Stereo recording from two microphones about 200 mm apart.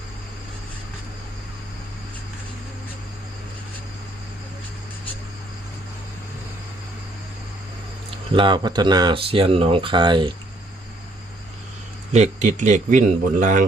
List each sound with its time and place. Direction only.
8.3 s speech: 25° right (ahead or behind)
12.1 s speech: 35° right (ahead or behind)